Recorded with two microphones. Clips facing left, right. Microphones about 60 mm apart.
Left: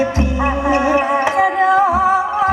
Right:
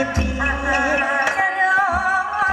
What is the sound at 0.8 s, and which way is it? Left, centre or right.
Music, left.